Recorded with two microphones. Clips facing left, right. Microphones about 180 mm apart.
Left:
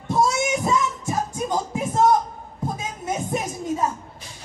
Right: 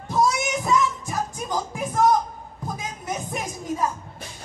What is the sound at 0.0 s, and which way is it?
Music, 25° left (ahead or behind).